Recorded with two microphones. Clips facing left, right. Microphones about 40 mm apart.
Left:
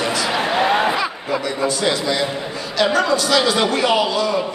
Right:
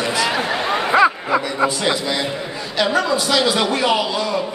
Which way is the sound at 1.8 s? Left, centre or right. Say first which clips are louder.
Left 1 dB; centre.